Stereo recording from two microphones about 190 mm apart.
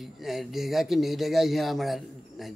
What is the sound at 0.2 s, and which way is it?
A man's voice, centre (ahead or behind).